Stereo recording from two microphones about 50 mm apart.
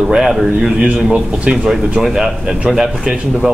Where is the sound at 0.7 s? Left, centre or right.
Centre.